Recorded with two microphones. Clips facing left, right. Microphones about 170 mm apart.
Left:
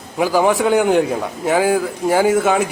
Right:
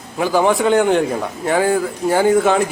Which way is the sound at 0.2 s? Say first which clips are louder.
Even; 5° left (ahead or behind).